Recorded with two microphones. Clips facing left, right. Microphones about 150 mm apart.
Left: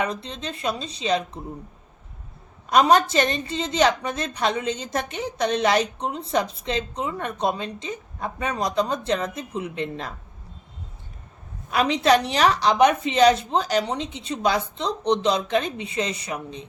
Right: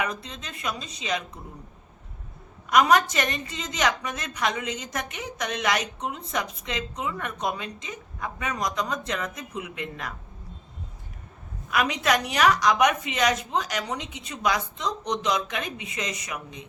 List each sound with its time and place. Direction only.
0.0 s a woman's voice: 30° left (ahead or behind)
2.6 s a woman's voice: 30° left (ahead or behind)
11.7 s a woman's voice: 30° left (ahead or behind)